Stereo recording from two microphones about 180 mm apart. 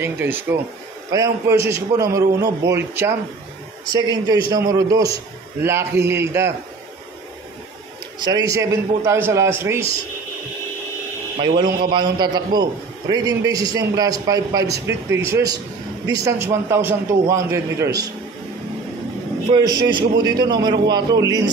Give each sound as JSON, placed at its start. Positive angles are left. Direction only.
{"t": 0.0, "sound": "a man's voice", "side_deg": -10}
{"t": 8.2, "sound": "a man's voice", "side_deg": -20}
{"t": 11.9, "sound": "a man's voice", "side_deg": -25}
{"t": 19.5, "sound": "a man's voice", "side_deg": -25}